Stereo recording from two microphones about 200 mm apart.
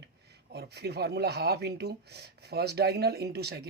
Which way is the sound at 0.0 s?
55° right (ahead or behind).